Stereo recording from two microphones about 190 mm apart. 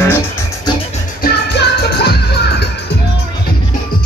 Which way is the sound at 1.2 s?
55° left (ahead or behind).